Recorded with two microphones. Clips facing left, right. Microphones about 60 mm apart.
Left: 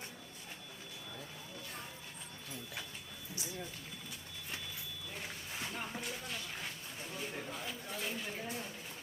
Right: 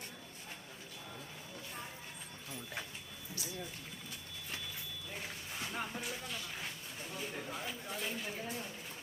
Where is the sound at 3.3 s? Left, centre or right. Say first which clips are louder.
Even; left.